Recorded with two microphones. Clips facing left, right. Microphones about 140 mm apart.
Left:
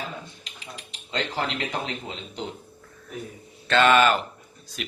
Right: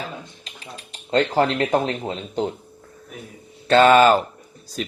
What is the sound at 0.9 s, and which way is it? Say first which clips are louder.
Speech: right 10 dB; 45° right (ahead or behind).